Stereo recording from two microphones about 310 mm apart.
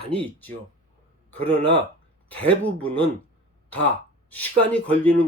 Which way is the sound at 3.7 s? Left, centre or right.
Centre.